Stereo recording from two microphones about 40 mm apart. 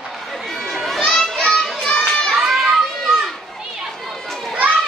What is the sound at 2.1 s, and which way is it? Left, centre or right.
Children playing, centre.